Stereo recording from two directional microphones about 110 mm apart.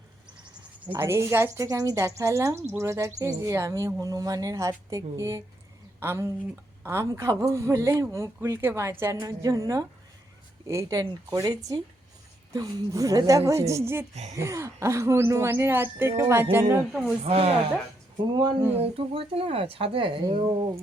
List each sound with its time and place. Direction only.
0.9 s speech: 25° right (ahead or behind)
9.2 s speech: 35° right (ahead or behind)
16.9 s speech: 5° right (ahead or behind)
17.2 s speech: 65° right (ahead or behind)
18.8 s speech: 60° right (ahead or behind)
20.2 s speech: 45° right (ahead or behind)